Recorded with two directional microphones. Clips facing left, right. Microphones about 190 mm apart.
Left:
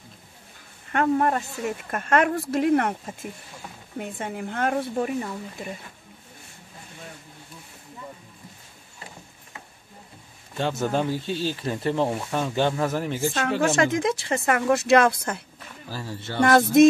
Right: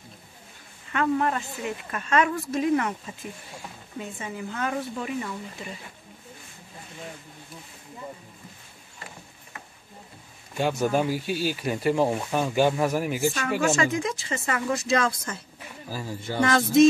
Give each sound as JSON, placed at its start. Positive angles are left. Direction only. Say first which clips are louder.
{"t": 0.8, "sound": "speech", "louder": "left 3 dB", "side_deg": 50}
{"t": 4.9, "sound": "speech", "louder": "left 5 dB", "side_deg": 45}
{"t": 10.5, "sound": "speech", "louder": "right 1 dB", "side_deg": -15}
{"t": 13.6, "sound": "speech", "louder": "left 3 dB", "side_deg": 75}
{"t": 16.4, "sound": "speech", "louder": "left 4 dB", "side_deg": 55}